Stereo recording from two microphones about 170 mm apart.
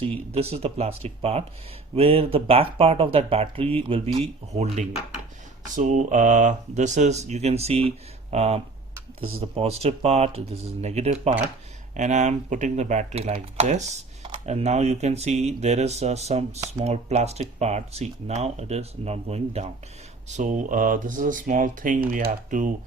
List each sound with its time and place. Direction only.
0.3 s speech: 35° right (ahead or behind)